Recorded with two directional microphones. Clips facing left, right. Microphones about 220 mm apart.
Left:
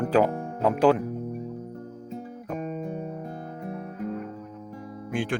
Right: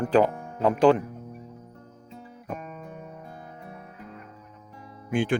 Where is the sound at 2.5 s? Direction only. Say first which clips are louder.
Left 13 dB; 35° left (ahead or behind).